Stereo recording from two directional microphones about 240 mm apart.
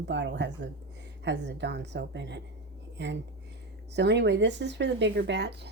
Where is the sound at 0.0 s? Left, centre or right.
Right.